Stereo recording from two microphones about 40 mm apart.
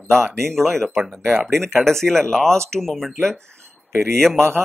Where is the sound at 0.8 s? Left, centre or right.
Centre.